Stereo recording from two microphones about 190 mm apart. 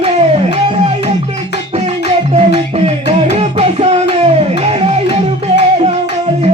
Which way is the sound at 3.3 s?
35° right (ahead or behind).